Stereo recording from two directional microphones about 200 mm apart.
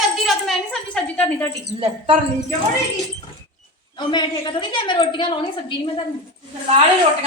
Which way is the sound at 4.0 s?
20° left (ahead or behind).